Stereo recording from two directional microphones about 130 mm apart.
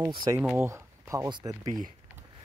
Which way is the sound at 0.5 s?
20° right (ahead or behind).